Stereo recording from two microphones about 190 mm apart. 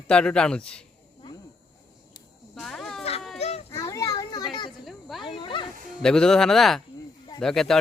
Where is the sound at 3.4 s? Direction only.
35° left (ahead or behind).